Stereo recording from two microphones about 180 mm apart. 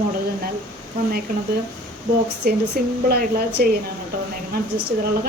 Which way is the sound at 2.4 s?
60° right (ahead or behind).